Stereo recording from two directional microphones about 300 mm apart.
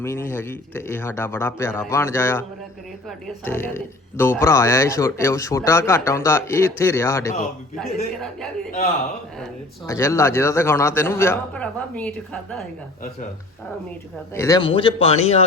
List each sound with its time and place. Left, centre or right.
0.0 s a man's voice: centre
9.8 s speech: centre
14.3 s a man's voice: centre